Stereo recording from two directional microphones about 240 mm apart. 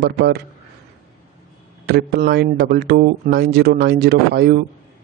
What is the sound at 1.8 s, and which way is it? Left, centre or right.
A man's voice, right.